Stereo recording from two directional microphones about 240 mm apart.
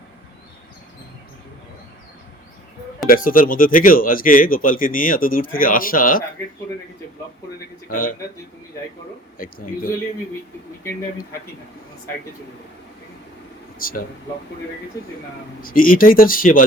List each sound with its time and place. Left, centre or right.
3.1 s speech: left
7.9 s speech: left
13.7 s speech: left
15.6 s speech: left